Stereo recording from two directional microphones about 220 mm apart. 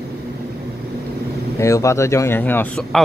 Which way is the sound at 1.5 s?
15° left (ahead or behind).